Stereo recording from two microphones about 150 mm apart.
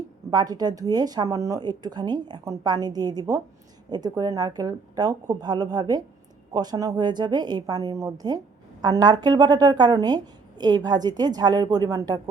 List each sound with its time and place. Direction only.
0.3 s speech: 25° right (ahead or behind)